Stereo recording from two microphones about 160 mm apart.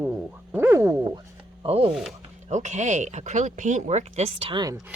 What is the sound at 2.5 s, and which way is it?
Speech, 50° right (ahead or behind).